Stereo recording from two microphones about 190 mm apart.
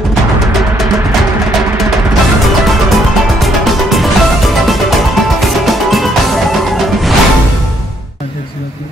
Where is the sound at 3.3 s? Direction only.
Centre (ahead or behind).